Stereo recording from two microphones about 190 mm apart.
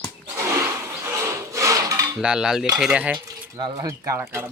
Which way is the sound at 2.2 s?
5° right (ahead or behind).